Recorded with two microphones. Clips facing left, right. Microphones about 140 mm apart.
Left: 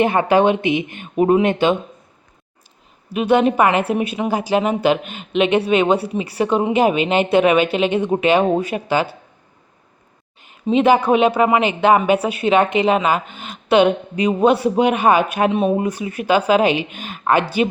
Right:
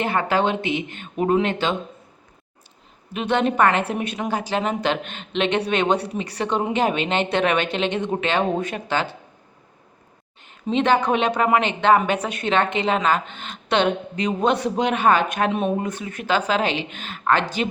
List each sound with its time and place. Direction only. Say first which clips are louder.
0.0 s speech: left 7 dB; 15° left (ahead or behind)
3.1 s speech: left 6 dB; 10° left (ahead or behind)
10.4 s speech: left 6 dB; 10° left (ahead or behind)